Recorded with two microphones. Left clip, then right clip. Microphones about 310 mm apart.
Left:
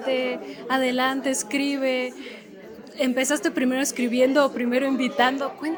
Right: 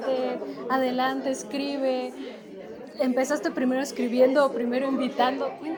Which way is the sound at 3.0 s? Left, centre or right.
Left.